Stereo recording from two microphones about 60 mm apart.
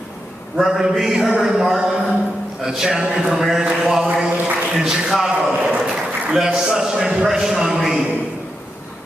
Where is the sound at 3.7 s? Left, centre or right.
Centre.